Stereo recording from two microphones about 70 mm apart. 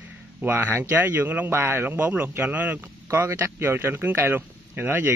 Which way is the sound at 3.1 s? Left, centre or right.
Right.